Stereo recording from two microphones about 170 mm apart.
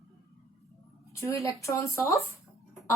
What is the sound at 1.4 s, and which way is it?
Speech, 20° left (ahead or behind).